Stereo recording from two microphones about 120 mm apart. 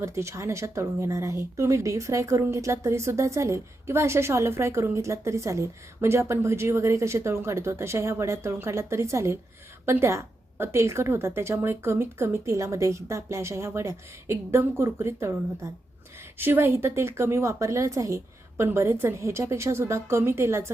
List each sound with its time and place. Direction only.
0.0 s speech: 25° right (ahead or behind)